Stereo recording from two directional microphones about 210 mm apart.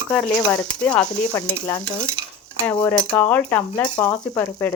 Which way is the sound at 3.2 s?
5° left (ahead or behind).